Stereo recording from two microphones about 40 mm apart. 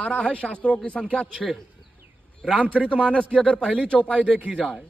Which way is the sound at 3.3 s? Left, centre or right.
Left.